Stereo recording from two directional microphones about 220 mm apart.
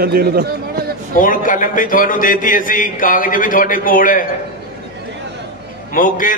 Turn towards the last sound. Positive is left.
turn(degrees=40)  # may be behind; listen again after turning